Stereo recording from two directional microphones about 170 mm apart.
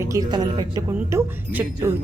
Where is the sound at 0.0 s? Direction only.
20° right (ahead or behind).